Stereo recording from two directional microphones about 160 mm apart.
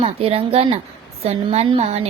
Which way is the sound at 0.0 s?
40° right (ahead or behind).